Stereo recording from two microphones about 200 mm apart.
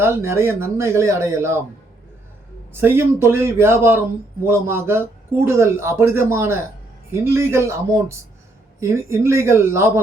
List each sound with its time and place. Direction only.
0.0 s speech: 10° right (ahead or behind)
2.8 s speech: 10° right (ahead or behind)